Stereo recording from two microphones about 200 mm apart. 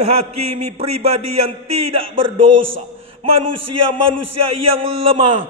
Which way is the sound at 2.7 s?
30° right (ahead or behind).